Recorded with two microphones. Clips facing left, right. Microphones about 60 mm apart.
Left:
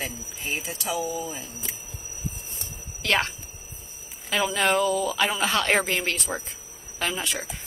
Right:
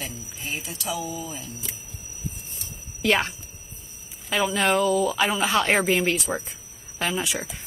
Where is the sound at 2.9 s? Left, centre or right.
Centre.